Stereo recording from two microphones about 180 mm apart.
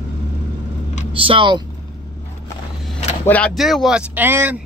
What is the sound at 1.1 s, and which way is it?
Speech, 30° right (ahead or behind).